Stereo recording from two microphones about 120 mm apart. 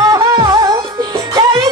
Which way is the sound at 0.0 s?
30° right (ahead or behind).